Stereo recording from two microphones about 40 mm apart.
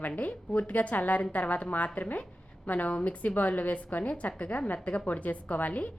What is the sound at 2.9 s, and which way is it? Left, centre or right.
A woman's voice, left.